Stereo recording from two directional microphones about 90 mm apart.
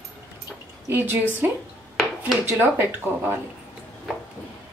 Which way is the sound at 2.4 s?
25° right (ahead or behind).